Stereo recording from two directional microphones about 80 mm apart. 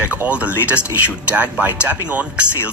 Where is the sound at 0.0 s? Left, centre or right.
Right.